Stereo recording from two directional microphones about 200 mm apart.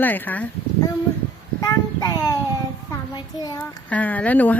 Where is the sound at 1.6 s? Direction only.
20° left (ahead or behind).